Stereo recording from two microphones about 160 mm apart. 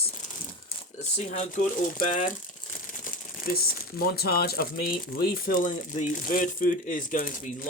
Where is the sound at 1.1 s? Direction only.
45° left (ahead or behind).